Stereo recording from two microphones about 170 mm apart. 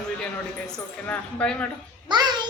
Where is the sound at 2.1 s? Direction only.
25° right (ahead or behind).